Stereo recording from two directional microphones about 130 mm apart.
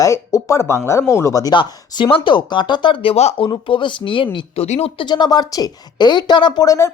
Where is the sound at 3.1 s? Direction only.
55° left (ahead or behind).